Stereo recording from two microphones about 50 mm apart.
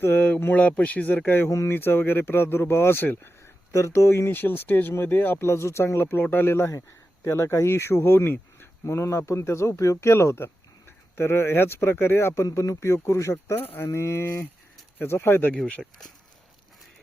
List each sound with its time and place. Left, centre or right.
0.0 s a sound: left
0.5 s speech: left
1.5 s speech: left
1.7 s speech: left
3.7 s speech: left
4.3 s speech: left
5.5 s speech: left
7.3 s a man's voice: left
8.8 s a man's voice: left
13.7 s speech: left
15.5 s speech: left